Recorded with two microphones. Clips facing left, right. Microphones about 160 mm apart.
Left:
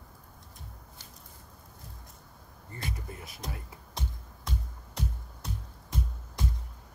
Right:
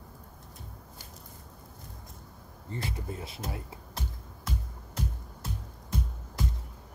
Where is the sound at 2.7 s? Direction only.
25° right (ahead or behind).